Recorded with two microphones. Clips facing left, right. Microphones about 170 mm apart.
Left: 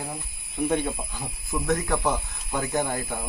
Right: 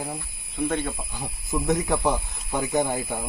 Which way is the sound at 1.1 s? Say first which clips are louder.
Right 2 dB; 20° right (ahead or behind).